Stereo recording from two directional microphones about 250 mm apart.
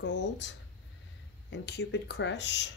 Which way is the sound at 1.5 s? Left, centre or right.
Left.